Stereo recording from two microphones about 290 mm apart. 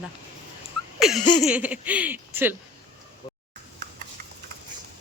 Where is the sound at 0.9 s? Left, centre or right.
Centre.